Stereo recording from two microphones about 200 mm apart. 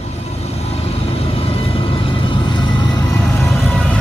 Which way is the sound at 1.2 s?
30° left (ahead or behind).